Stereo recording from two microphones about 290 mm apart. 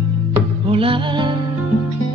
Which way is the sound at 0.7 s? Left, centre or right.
Centre.